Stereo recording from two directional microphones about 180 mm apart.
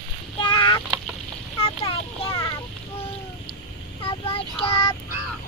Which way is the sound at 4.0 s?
30° left (ahead or behind).